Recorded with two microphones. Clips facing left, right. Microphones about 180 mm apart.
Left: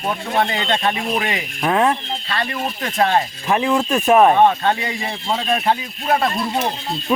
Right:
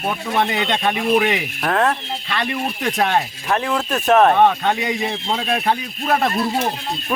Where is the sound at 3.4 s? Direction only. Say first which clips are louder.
Left 3 dB; 10° left (ahead or behind).